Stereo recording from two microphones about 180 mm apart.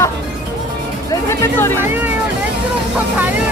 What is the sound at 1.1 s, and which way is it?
Music, 15° left (ahead or behind).